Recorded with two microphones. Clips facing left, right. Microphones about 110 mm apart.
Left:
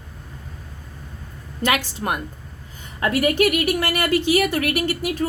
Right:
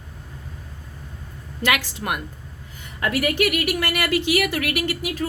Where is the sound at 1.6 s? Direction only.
30° left (ahead or behind).